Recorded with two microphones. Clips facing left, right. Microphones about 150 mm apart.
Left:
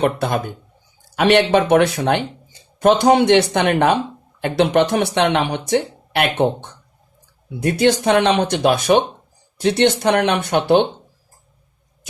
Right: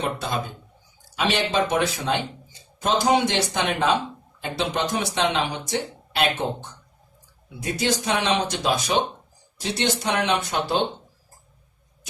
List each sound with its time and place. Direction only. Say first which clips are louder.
0.2 s speech: left 7 dB; 60° left (ahead or behind)